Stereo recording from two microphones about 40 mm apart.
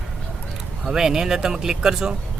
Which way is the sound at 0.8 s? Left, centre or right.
Centre.